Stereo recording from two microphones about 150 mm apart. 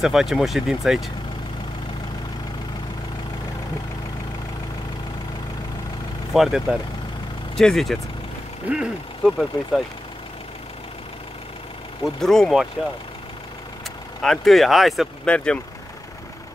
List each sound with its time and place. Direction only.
0.0 s speech: centre (ahead or behind)
6.3 s speech: centre (ahead or behind)
12.0 s speech: 5° left (ahead or behind)
14.2 s speech: centre (ahead or behind)